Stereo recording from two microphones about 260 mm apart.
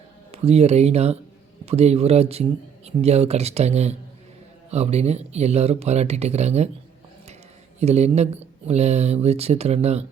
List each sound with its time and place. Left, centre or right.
0.3 s speech: right
7.8 s speech: right